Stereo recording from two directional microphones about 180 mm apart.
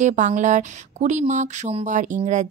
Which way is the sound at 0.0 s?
45° right (ahead or behind).